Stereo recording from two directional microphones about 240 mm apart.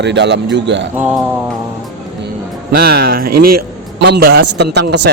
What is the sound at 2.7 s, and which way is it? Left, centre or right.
A man's voice, right.